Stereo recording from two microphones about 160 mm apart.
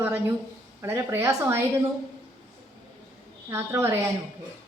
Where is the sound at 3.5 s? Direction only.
15° right (ahead or behind).